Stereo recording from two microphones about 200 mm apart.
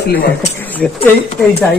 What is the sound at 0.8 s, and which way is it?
Speech, 5° left (ahead or behind).